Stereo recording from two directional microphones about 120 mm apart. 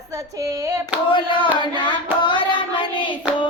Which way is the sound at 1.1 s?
45° left (ahead or behind).